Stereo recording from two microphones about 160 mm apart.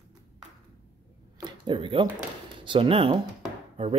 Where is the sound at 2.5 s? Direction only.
30° right (ahead or behind).